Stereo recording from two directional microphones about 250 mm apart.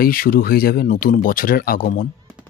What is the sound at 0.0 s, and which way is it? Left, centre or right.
Speech, left.